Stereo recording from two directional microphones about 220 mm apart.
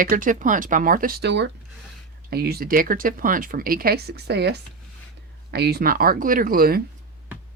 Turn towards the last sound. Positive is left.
turn(degrees=-40)  # may be behind; listen again after turning